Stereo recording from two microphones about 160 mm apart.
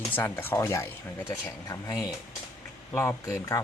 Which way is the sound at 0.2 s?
15° left (ahead or behind).